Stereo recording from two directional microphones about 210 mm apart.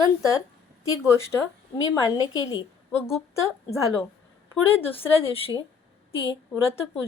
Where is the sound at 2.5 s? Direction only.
20° left (ahead or behind).